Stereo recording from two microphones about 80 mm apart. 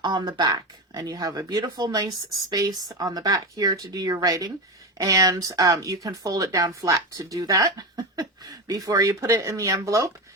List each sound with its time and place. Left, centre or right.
0.3 s speech: right